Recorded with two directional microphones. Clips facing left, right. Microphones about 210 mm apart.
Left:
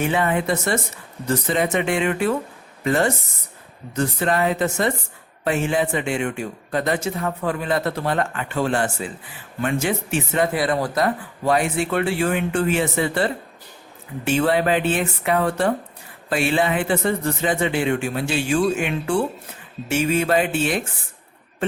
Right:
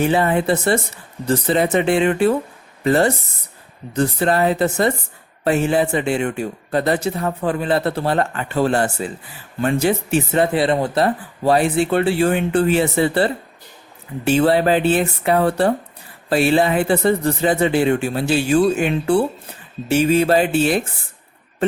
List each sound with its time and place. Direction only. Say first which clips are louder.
0.0 s speech: right 4 dB; 35° right (ahead or behind)